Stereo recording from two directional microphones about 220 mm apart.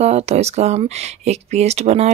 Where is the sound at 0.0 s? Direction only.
30° right (ahead or behind).